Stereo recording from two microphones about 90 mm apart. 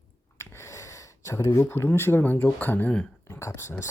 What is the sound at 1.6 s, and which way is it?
Speech, 25° left (ahead or behind).